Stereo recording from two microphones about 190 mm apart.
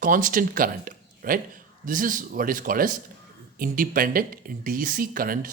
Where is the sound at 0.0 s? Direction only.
45° right (ahead or behind).